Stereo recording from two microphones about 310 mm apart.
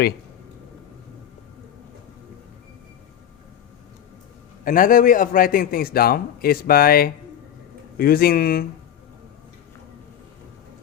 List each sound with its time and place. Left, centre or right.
4.6 s a man's voice: left